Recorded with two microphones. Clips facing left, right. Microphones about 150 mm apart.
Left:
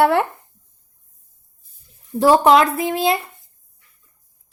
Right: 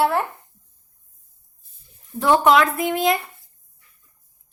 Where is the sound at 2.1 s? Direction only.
30° left (ahead or behind).